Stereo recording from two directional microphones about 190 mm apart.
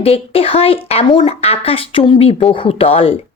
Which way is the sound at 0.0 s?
30° left (ahead or behind).